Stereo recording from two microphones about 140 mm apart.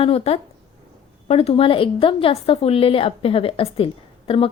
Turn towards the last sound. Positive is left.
turn(degrees=40)  # may be behind; listen again after turning